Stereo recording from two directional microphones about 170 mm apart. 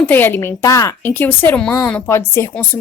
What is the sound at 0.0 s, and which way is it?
A woman's voice, 10° left (ahead or behind).